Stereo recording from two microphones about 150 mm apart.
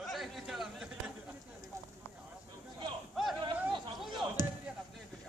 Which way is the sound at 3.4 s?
35° right (ahead or behind).